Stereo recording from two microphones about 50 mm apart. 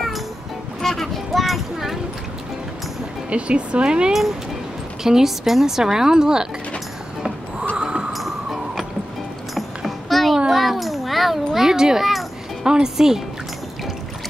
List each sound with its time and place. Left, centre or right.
0.7 s a sound: centre
3.3 s a woman's voice: right
7.7 s music: centre
8.1 s music: centre
9.6 s a sound: centre
12.6 s a woman's voice: centre